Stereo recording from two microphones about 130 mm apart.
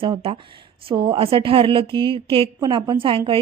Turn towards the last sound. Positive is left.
turn(degrees=-45)  # may be behind; listen again after turning